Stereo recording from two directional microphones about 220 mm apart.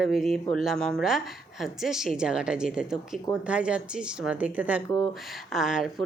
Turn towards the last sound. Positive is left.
turn(degrees=0)  # may be behind; listen again after turning